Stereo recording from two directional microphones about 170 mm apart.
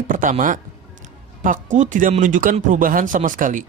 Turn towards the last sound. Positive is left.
turn(degrees=-50)  # may be behind; listen again after turning